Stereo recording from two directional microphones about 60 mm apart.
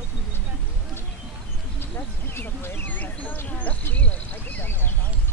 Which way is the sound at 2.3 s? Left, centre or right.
Left.